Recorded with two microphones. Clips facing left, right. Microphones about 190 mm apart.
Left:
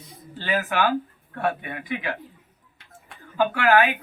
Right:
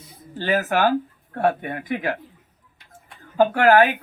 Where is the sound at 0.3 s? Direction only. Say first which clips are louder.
Right 4 dB; 45° right (ahead or behind).